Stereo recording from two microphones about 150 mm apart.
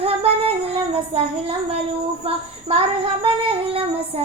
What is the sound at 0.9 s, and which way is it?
Speech, 40° right (ahead or behind).